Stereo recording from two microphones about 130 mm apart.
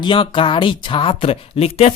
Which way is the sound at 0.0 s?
40° left (ahead or behind).